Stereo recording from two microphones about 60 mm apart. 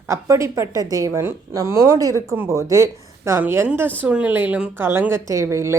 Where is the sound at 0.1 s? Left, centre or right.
Right.